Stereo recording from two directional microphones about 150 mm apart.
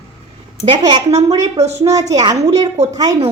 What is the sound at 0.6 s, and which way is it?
Speech, 30° right (ahead or behind).